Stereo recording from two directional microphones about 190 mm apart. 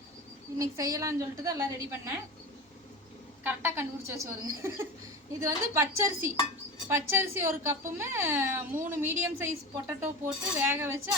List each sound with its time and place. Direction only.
0.6 s speech: 15° right (ahead or behind)
3.4 s speech: 10° right (ahead or behind)